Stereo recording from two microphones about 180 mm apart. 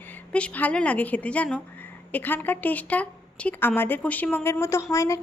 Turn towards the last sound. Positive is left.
turn(degrees=20)  # may be behind; listen again after turning